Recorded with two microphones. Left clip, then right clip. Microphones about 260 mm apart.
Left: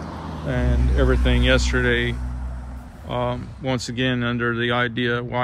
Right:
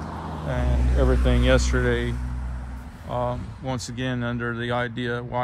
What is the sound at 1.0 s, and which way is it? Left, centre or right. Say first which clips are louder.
Speech: left 2 dB; centre.